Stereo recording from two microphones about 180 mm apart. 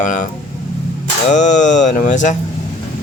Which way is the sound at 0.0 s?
45° left (ahead or behind).